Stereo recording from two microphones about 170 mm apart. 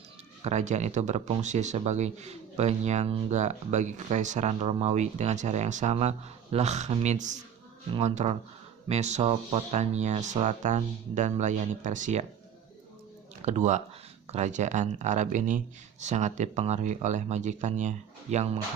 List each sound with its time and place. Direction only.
0.4 s speech: 45° right (ahead or behind)
13.4 s speech: 40° right (ahead or behind)